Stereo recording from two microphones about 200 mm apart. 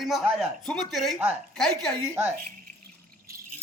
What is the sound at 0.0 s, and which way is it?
Speech, centre (ahead or behind).